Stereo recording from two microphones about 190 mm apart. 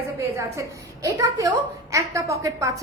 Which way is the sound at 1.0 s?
15° right (ahead or behind).